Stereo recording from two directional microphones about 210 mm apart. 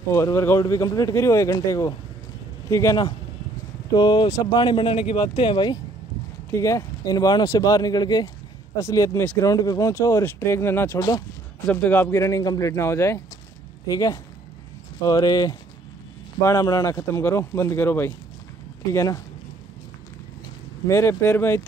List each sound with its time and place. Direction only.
0.1 s speech: 15° left (ahead or behind)
20.9 s speech: 15° left (ahead or behind)